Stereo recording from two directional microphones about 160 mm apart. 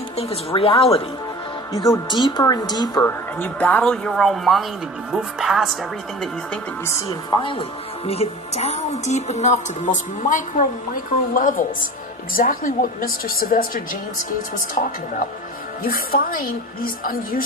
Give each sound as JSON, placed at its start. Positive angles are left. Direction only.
{"t": 0.2, "sound": "speech", "side_deg": 35}
{"t": 1.7, "sound": "speech", "side_deg": 15}
{"t": 2.0, "sound": "a woman's voice", "side_deg": 30}
{"t": 3.0, "sound": "speech", "side_deg": 15}
{"t": 6.8, "sound": "a woman's voice", "side_deg": 20}